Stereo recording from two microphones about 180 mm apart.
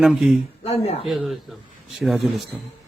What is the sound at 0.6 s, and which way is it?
Speech, 35° left (ahead or behind).